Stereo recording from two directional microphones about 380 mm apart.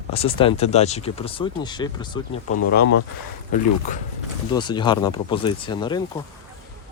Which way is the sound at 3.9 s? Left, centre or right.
Centre.